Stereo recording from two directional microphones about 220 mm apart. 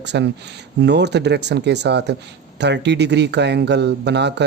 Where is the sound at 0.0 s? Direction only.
50° right (ahead or behind).